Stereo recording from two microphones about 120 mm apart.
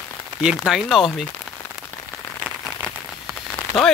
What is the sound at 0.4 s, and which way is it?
Speech, 5° right (ahead or behind).